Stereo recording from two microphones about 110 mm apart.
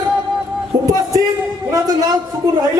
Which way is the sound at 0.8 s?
35° right (ahead or behind).